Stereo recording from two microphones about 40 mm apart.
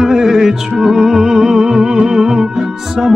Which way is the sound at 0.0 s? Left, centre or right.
Centre.